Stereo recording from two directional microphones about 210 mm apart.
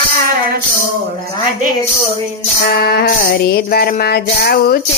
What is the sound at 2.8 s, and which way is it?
Music, 50° left (ahead or behind).